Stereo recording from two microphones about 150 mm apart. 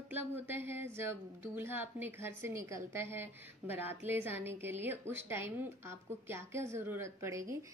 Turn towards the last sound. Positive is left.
turn(degrees=-20)  # may be behind; listen again after turning